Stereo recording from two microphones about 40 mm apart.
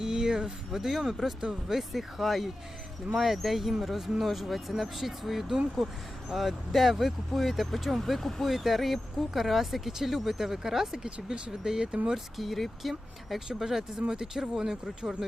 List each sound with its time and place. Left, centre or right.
0.0 s speech: centre
12.4 s speech: centre